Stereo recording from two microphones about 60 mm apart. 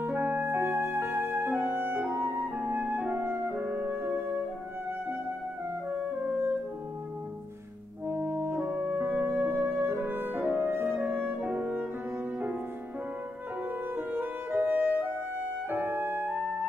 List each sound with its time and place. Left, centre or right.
0.4 s music: right
3.5 s music: right
8.1 s french horn: right
8.7 s music: right
11.4 s music: right
13.9 s music: right